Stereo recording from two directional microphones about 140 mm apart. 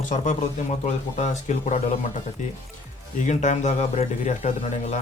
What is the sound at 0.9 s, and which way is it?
Speech, 55° left (ahead or behind).